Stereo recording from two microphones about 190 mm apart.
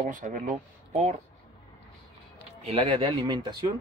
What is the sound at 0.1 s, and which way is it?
Speech, 45° right (ahead or behind).